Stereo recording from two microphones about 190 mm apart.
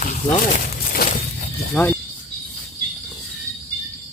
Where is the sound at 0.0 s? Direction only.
45° left (ahead or behind).